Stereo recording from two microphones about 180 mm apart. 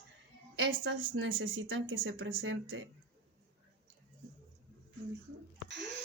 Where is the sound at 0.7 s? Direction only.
90° right.